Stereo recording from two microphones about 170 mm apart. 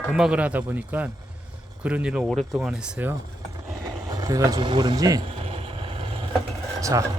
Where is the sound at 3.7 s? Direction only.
20° right (ahead or behind).